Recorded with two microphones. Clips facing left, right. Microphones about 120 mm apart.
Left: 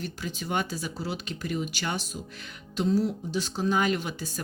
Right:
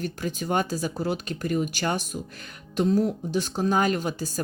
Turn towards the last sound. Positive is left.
turn(degrees=-40)  # may be behind; listen again after turning